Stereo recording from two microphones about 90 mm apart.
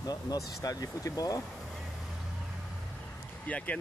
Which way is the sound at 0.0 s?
45° left (ahead or behind).